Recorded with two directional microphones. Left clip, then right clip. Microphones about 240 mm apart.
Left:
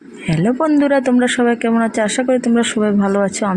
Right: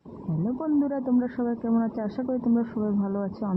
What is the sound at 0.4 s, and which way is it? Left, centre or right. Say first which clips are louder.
Speech: left 12 dB; left.